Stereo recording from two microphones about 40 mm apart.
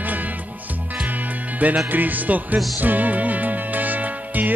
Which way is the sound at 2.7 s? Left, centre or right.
Right.